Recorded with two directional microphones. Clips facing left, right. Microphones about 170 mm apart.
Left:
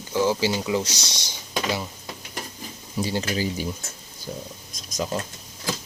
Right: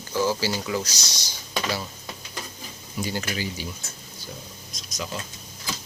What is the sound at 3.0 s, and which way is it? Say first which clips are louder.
Speech: left 4 dB; 30° left (ahead or behind).